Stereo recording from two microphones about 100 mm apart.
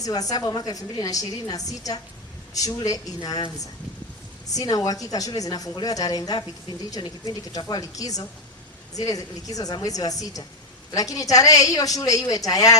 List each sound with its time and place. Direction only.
0.0 s a woman's voice: 40° left (ahead or behind)
4.5 s a woman's voice: 40° left (ahead or behind)